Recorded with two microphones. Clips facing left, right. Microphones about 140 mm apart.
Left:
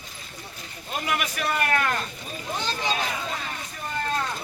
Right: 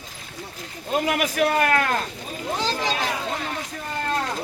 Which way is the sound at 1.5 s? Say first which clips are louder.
Right 4 dB; 90° right.